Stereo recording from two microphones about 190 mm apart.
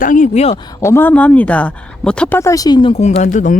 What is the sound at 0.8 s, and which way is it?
Speech, 10° left (ahead or behind).